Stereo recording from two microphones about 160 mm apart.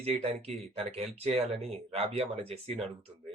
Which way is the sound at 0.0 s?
40° right (ahead or behind).